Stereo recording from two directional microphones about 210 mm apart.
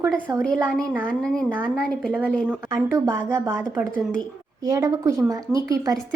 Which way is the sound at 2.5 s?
10° right (ahead or behind).